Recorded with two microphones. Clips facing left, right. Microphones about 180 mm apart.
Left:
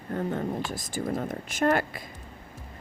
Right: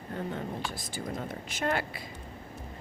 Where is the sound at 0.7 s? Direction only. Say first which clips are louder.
Left 6 dB; 45° left (ahead or behind).